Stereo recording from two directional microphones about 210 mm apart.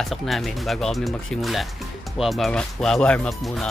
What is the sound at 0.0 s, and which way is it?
Speech, centre (ahead or behind).